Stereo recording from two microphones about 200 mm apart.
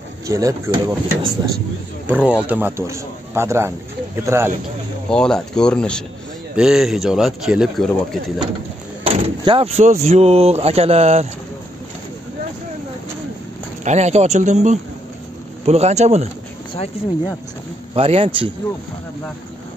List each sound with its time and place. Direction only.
0.3 s a man's voice: 15° right (ahead or behind)
2.0 s a man's voice: 5° right (ahead or behind)
5.1 s speech: 5° left (ahead or behind)
9.0 s speech: 30° right (ahead or behind)
13.8 s speech: 35° right (ahead or behind)
17.9 s speech: 30° right (ahead or behind)